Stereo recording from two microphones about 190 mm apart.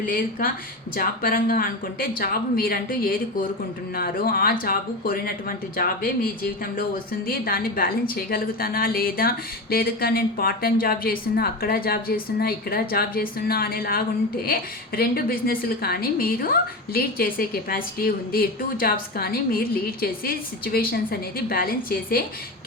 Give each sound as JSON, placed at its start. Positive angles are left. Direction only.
{"t": 0.0, "sound": "a woman's voice", "side_deg": 45}